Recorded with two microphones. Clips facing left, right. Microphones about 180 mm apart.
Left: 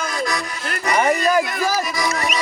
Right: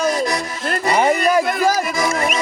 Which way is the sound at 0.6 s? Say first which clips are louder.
Right 4 dB; 30° right (ahead or behind).